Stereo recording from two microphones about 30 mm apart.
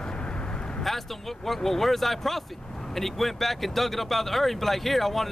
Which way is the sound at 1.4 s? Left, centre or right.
Centre.